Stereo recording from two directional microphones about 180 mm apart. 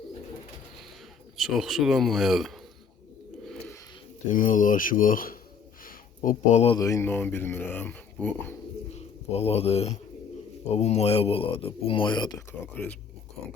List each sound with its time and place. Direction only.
1.4 s speech: centre (ahead or behind)
4.3 s speech: 50° left (ahead or behind)
5.8 s a sound: 50° left (ahead or behind)
6.7 s speech: 15° left (ahead or behind)
8.9 s speech: 35° left (ahead or behind)
12.7 s speech: 10° left (ahead or behind)